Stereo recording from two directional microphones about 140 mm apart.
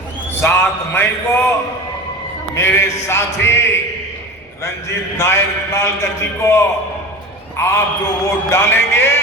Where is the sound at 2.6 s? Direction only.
20° left (ahead or behind).